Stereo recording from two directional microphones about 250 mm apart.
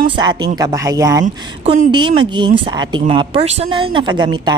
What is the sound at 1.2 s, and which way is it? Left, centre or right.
A woman's voice, right.